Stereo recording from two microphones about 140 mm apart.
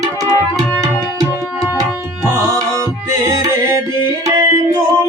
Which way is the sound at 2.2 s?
20° right (ahead or behind).